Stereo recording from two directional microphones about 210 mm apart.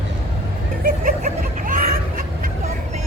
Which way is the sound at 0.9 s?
40° right (ahead or behind).